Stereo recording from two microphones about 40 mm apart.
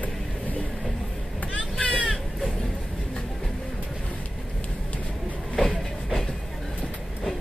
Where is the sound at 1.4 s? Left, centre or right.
Left.